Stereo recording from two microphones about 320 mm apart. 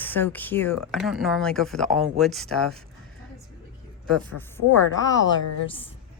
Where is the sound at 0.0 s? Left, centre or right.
Centre.